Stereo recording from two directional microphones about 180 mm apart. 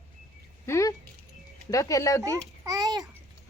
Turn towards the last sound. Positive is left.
turn(degrees=-20)  # may be behind; listen again after turning